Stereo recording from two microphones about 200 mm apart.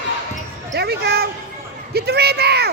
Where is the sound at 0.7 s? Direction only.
55° right (ahead or behind).